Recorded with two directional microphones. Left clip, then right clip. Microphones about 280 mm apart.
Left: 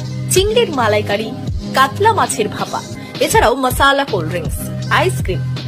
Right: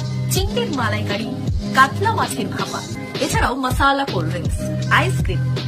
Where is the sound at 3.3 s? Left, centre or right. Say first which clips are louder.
Left 9 dB; centre.